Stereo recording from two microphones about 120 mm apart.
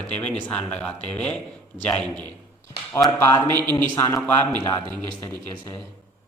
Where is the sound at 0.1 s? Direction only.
10° left (ahead or behind).